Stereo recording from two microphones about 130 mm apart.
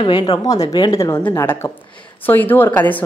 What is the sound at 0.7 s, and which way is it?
A woman's voice, 30° left (ahead or behind).